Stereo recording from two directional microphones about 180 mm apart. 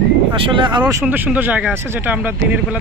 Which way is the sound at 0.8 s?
10° right (ahead or behind).